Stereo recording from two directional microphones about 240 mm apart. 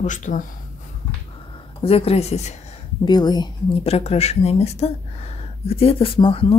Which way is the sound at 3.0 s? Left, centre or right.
Centre.